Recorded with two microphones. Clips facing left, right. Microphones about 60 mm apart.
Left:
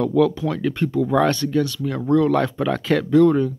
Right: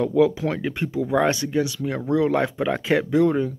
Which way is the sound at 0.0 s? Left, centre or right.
Centre.